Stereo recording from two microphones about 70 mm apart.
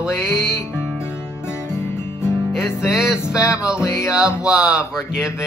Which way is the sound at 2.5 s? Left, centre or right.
Centre.